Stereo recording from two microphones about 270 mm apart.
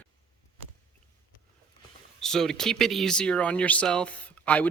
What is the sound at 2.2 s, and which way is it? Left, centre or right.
Speech, centre.